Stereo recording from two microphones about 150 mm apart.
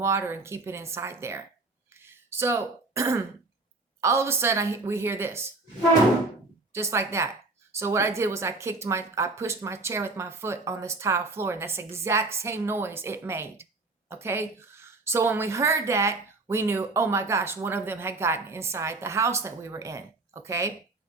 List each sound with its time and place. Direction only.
0.0 s a woman's voice: 15° right (ahead or behind)
1.9 s throat clearing: 15° right (ahead or behind)
4.0 s a woman's voice: 20° right (ahead or behind)
6.7 s a woman's voice: 15° right (ahead or behind)